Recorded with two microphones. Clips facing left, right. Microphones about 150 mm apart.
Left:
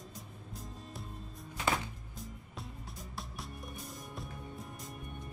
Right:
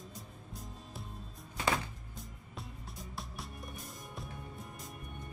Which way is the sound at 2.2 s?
Centre (ahead or behind).